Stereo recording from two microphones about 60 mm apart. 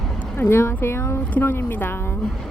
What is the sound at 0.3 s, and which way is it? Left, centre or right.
Speech, left.